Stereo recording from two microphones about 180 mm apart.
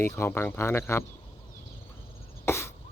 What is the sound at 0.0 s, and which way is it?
Speech, 15° left (ahead or behind).